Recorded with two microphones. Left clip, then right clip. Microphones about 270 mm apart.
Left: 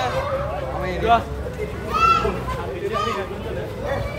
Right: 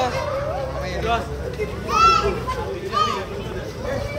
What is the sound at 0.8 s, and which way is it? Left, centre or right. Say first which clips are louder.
Vehicle: left 7 dB; left.